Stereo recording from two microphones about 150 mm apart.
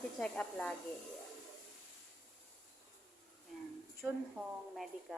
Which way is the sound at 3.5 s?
Centre (ahead or behind).